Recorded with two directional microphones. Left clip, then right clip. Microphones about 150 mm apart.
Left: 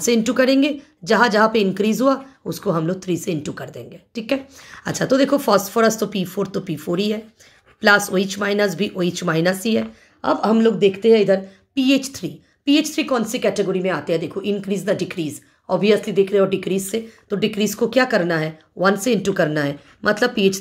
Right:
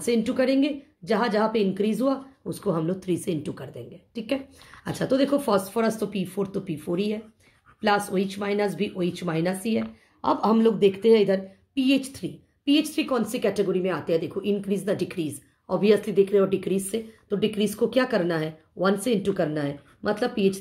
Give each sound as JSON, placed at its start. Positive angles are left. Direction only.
{"t": 0.0, "sound": "a woman's voice", "side_deg": 35}
{"t": 10.2, "sound": "a woman's voice", "side_deg": 20}